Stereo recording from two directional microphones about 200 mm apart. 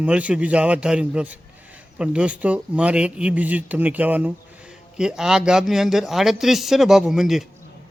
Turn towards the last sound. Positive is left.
turn(degrees=0)  # may be behind; listen again after turning